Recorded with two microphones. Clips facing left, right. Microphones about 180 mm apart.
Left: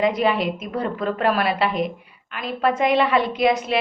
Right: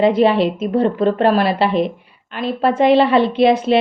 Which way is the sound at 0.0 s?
30° right (ahead or behind).